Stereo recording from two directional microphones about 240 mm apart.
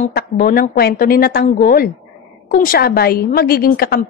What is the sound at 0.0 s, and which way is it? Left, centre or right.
A woman's voice, left.